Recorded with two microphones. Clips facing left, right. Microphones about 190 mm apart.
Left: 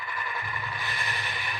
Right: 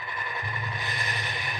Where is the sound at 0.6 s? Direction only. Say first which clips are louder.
Right 1 dB; 20° right (ahead or behind).